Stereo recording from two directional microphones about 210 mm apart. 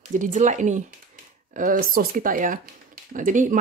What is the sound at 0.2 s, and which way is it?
A woman's voice, 35° right (ahead or behind).